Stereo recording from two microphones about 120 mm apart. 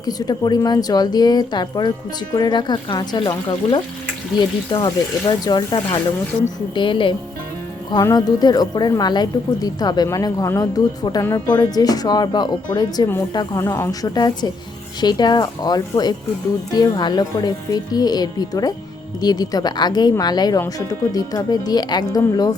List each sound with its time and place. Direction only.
0.0 s a woman's voice: 35° left (ahead or behind)
11.3 s speech: 20° left (ahead or behind)
11.5 s a woman's voice: 35° left (ahead or behind)
13.6 s a woman's voice: 25° left (ahead or behind)